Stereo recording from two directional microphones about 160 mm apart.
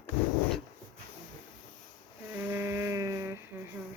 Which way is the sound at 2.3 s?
15° right (ahead or behind).